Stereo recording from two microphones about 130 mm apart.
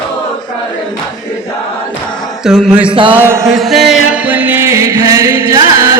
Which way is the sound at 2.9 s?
40° right (ahead or behind).